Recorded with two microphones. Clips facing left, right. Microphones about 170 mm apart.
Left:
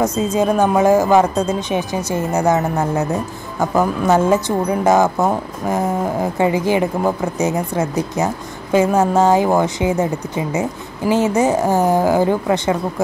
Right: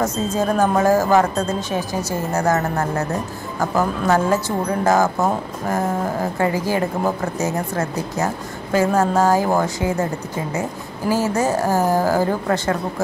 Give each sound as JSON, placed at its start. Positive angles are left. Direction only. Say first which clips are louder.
{"t": 0.0, "sound": "a woman's voice", "louder": "left 4 dB", "side_deg": 15}